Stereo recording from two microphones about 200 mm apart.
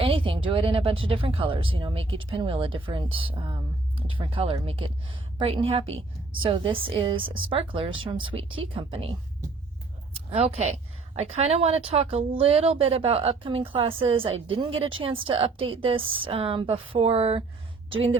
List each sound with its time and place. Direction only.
0.0 s a woman's voice: 25° right (ahead or behind)
10.2 s a woman's voice: 30° right (ahead or behind)